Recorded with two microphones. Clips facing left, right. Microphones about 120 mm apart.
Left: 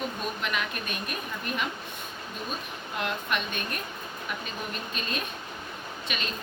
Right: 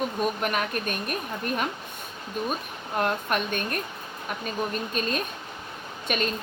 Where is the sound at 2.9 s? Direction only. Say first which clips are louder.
Right 5 dB; 45° right (ahead or behind).